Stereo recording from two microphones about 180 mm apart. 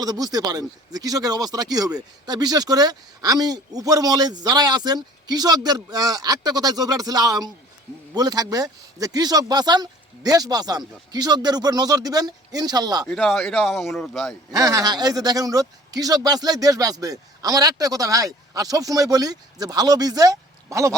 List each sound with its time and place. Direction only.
0.0 s speech: 20° right (ahead or behind)
13.1 s speech: 5° left (ahead or behind)
14.5 s speech: 20° right (ahead or behind)